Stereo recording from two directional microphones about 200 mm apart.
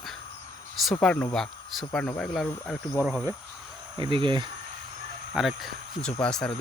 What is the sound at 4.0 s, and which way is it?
Speech, 25° right (ahead or behind).